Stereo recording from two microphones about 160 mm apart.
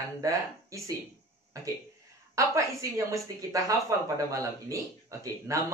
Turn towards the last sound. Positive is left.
turn(degrees=-20)  # may be behind; listen again after turning